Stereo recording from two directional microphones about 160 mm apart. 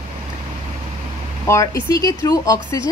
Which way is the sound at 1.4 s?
20° left (ahead or behind).